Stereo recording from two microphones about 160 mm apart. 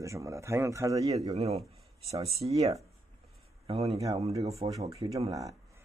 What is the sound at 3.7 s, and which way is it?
Speech, 40° right (ahead or behind).